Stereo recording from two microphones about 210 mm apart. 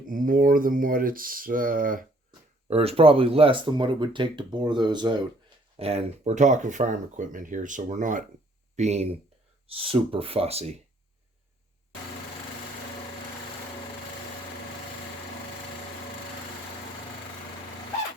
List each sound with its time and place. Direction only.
0.1 s speech: 40° right (ahead or behind)
2.6 s speech: 30° right (ahead or behind)